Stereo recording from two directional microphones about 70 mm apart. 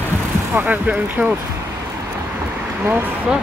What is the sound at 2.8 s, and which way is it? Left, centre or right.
Speech, right.